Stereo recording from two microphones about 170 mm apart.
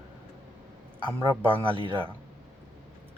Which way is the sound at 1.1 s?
15° right (ahead or behind).